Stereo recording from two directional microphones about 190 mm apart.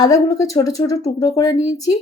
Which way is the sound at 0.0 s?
20° left (ahead or behind).